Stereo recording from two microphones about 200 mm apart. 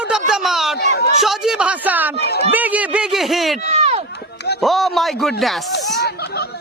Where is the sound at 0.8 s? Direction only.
55° left (ahead or behind).